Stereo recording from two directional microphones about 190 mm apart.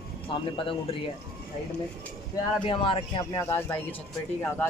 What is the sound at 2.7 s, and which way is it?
Speech, 30° left (ahead or behind).